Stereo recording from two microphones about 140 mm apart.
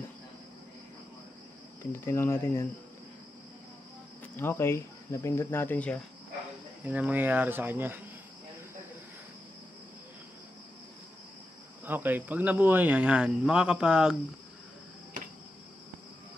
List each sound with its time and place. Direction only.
1.9 s speech: 15° left (ahead or behind)
4.4 s speech: 15° left (ahead or behind)
6.8 s speech: 10° right (ahead or behind)
11.8 s speech: 15° right (ahead or behind)